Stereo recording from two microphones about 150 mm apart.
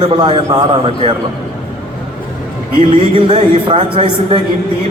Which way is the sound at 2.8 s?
35° right (ahead or behind).